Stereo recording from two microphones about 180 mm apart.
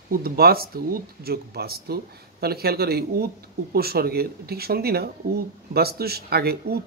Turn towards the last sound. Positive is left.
turn(degrees=-60)  # may be behind; listen again after turning